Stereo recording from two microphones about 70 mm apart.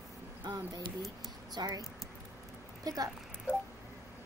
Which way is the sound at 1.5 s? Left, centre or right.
Right.